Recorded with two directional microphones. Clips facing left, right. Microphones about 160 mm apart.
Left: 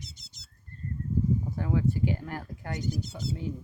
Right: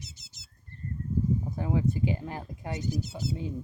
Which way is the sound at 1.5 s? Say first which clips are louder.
Even; 20° right (ahead or behind).